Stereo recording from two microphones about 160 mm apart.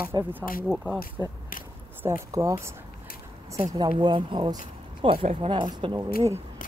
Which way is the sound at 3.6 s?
20° right (ahead or behind).